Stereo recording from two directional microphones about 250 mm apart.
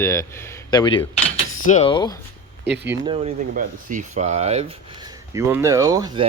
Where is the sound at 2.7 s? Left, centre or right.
Right.